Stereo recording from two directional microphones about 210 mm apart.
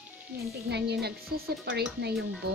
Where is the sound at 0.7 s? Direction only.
50° right (ahead or behind).